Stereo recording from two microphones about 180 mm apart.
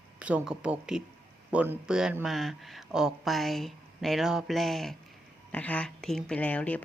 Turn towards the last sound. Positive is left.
turn(degrees=10)  # may be behind; listen again after turning